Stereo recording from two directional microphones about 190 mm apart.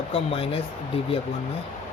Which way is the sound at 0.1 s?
30° left (ahead or behind).